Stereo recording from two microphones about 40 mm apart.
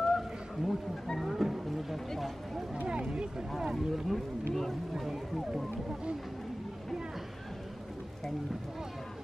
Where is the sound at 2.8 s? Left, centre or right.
Centre.